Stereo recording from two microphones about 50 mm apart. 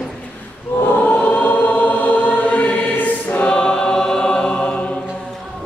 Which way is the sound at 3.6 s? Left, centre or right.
Centre.